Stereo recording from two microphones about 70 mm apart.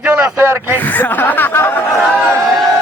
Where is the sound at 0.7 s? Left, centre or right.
Left.